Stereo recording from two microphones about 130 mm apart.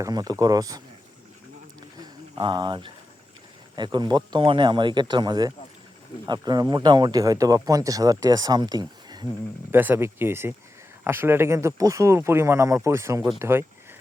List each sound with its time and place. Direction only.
0.0 s speech: 30° right (ahead or behind)
2.4 s speech: 40° right (ahead or behind)
9.7 s speech: 15° right (ahead or behind)